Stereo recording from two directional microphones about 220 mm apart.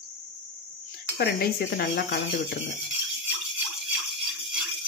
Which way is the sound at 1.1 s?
45° left (ahead or behind).